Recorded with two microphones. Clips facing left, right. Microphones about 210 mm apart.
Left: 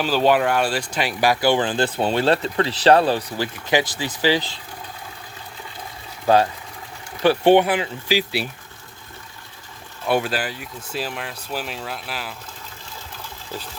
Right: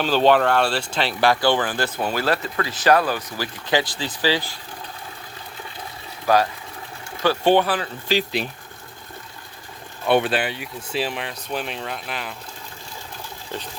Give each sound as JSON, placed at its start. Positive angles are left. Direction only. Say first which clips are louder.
{"t": 0.0, "sound": "speech", "louder": "right 1 dB", "side_deg": 10}
{"t": 1.6, "sound": "speech", "louder": "left 3 dB", "side_deg": 25}
{"t": 3.7, "sound": "speech", "louder": "left 1 dB", "side_deg": 15}
{"t": 6.2, "sound": "speech", "louder": "left 2 dB", "side_deg": 25}
{"t": 10.1, "sound": "speech", "louder": "right 2 dB", "side_deg": 0}